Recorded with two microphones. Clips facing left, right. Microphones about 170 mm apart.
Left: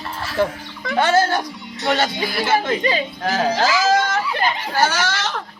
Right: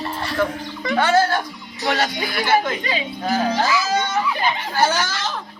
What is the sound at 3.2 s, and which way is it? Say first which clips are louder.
Speech: left 1 dB; 90° left.